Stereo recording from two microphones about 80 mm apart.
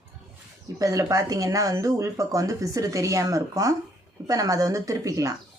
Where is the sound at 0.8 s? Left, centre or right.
Right.